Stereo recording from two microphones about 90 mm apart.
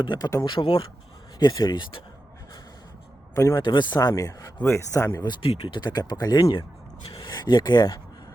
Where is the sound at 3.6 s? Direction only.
55° left (ahead or behind); by 5.2 s 30° left (ahead or behind).